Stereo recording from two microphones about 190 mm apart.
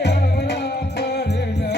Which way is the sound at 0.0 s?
60° left (ahead or behind).